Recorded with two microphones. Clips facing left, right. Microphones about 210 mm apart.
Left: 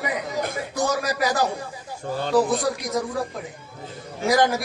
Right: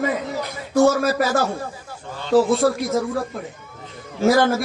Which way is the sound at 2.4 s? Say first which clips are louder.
Right 5 dB; 15° left (ahead or behind).